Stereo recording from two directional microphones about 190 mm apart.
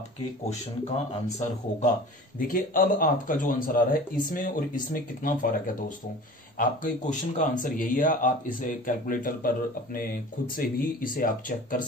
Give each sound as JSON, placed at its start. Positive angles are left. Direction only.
{"t": 0.5, "sound": "a man's voice", "side_deg": 35}